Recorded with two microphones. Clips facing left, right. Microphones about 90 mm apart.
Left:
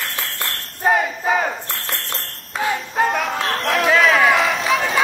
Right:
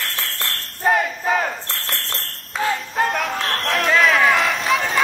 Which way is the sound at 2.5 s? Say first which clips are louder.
Even; 5° left (ahead or behind).